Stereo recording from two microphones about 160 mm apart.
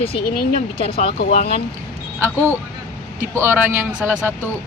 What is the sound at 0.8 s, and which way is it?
Speech, 35° left (ahead or behind).